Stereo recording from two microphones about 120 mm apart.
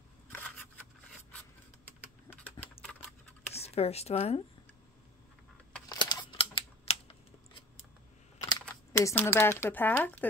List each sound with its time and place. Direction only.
2.8 s typing: 5° left (ahead or behind)
3.5 s speech: 60° left (ahead or behind)
5.9 s camera: 40° left (ahead or behind); by 7.8 s 55° left (ahead or behind)
8.4 s typing: 30° left (ahead or behind)
9.1 s speech: 20° left (ahead or behind)